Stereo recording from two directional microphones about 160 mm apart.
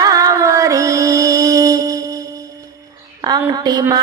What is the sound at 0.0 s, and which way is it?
Music, 20° right (ahead or behind).